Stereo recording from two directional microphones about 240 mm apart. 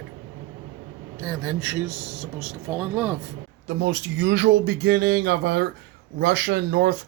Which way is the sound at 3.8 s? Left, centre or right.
Right.